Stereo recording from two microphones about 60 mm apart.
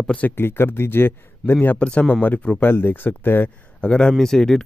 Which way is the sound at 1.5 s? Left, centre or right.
Left.